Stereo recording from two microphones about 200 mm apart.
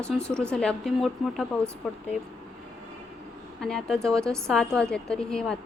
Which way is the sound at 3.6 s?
5° left (ahead or behind).